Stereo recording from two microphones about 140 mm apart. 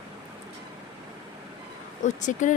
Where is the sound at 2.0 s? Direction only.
60° left (ahead or behind).